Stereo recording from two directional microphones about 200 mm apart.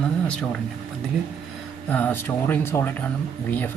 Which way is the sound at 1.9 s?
10° left (ahead or behind).